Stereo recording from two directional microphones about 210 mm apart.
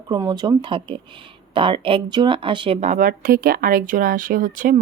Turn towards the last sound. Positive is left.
turn(degrees=-40)  # may be behind; listen again after turning